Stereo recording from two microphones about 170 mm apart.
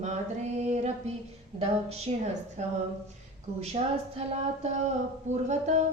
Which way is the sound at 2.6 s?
45° right (ahead or behind).